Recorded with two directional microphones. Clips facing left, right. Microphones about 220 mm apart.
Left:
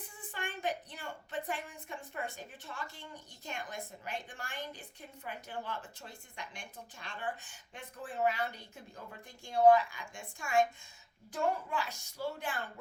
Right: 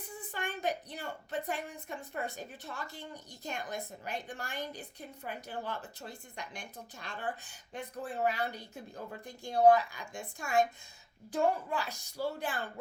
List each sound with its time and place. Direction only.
0.3 s a woman's voice: 40° right (ahead or behind)